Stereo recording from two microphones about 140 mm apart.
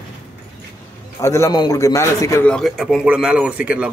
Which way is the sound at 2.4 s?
5° left (ahead or behind).